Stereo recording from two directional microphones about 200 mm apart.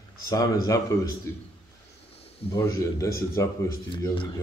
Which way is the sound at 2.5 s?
15° left (ahead or behind).